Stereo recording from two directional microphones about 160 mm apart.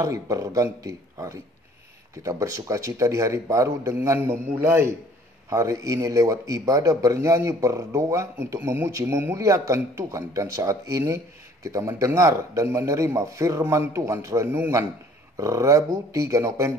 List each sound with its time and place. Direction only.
0.0 s a man's voice: 20° right (ahead or behind)